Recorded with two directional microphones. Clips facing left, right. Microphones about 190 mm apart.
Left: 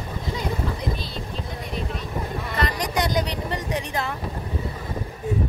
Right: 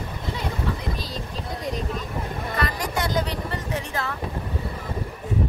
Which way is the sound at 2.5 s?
20° left (ahead or behind).